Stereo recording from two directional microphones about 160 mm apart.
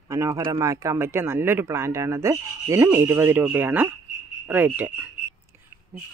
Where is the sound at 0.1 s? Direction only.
20° right (ahead or behind).